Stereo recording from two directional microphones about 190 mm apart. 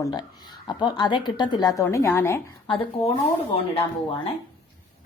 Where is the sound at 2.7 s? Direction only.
30° left (ahead or behind).